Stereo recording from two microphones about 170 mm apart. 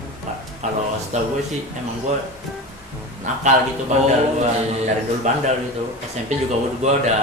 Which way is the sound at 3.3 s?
45° right (ahead or behind).